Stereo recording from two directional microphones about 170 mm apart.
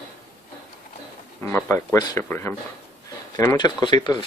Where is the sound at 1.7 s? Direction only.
15° left (ahead or behind).